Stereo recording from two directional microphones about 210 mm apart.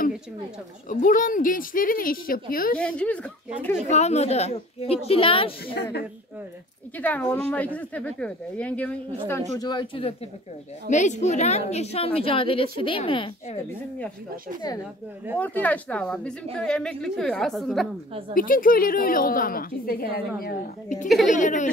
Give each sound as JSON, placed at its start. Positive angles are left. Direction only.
{"t": 0.8, "sound": "speech", "side_deg": 40}
{"t": 2.8, "sound": "a woman's voice", "side_deg": 5}
{"t": 3.9, "sound": "a woman's voice", "side_deg": 30}
{"t": 7.0, "sound": "a woman's voice", "side_deg": 5}
{"t": 9.6, "sound": "a woman's voice", "side_deg": 20}
{"t": 10.9, "sound": "a woman's voice", "side_deg": 35}
{"t": 15.3, "sound": "a woman's voice", "side_deg": 10}
{"t": 18.3, "sound": "a woman's voice", "side_deg": 40}